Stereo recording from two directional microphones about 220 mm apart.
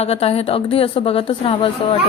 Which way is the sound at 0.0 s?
25° left (ahead or behind).